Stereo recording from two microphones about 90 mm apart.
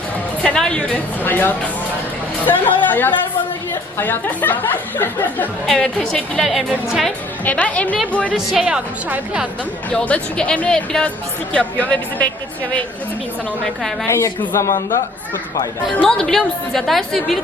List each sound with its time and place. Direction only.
0.4 s a woman's voice: 10° left (ahead or behind)
5.6 s a woman's voice: 5° left (ahead or behind)
7.4 s speech: 15° left (ahead or behind)
8.3 s a woman's voice: centre (ahead or behind)
8.6 s a woman's voice: 15° right (ahead or behind)
9.9 s speech: 10° left (ahead or behind)
14.1 s a woman's voice: 30° left (ahead or behind)
16.0 s a woman's voice: 5° left (ahead or behind)